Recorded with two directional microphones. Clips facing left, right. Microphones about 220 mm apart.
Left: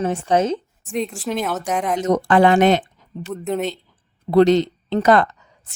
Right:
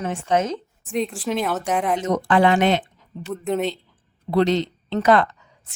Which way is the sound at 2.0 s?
45° left (ahead or behind).